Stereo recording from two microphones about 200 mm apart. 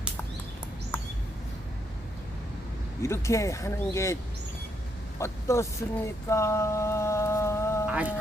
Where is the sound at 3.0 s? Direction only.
15° left (ahead or behind).